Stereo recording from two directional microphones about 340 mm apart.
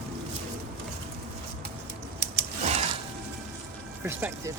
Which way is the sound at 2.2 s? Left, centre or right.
Right.